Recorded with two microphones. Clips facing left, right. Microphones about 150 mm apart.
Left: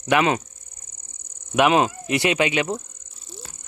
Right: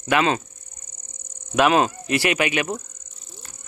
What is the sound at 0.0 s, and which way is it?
Speech, 20° left (ahead or behind).